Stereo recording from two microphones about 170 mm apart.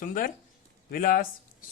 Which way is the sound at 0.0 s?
55° left (ahead or behind).